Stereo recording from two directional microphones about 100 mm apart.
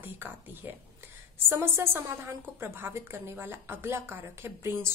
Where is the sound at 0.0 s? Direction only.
20° right (ahead or behind).